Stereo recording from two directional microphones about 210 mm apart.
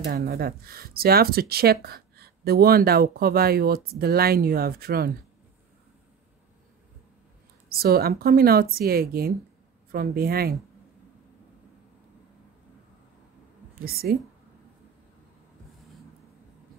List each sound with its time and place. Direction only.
0.0 s speech: 50° right (ahead or behind)
7.7 s speech: 45° right (ahead or behind)
13.7 s a woman's voice: 45° right (ahead or behind)